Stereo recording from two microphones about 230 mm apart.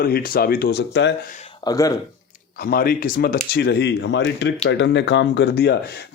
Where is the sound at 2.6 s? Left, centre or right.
Left.